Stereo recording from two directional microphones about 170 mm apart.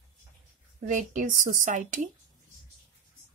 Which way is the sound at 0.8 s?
50° right (ahead or behind).